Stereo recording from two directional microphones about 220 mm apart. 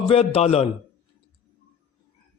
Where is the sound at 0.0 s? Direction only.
25° left (ahead or behind).